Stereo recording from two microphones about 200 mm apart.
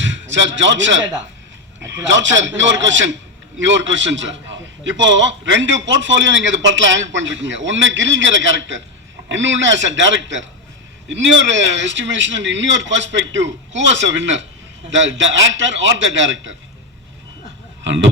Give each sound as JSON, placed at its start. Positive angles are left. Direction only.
{"t": 0.0, "sound": "a man's voice", "side_deg": -65}
{"t": 2.0, "sound": "a man's voice", "side_deg": -65}
{"t": 17.8, "sound": "a sound", "side_deg": -65}